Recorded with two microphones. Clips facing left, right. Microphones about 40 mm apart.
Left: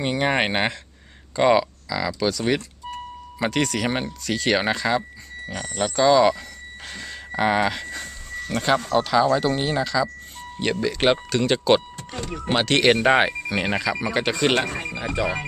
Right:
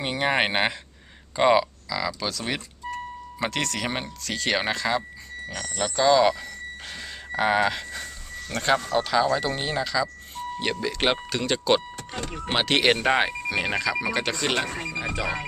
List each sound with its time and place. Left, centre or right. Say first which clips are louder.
0.0 s speech: left 2 dB; centre
1.9 s speech: left 7 dB; centre
7.9 s speech: left 3 dB; centre
12.3 s speech: left 7 dB; centre
12.5 s speech: left 2 dB; centre
12.9 s speech: left 4 dB; centre